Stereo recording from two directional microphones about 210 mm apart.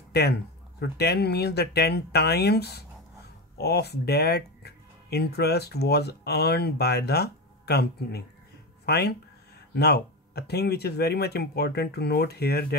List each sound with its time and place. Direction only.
0.1 s speech: 50° left (ahead or behind)